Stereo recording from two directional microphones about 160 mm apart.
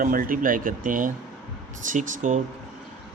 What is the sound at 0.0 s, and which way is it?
Speech, 60° right (ahead or behind).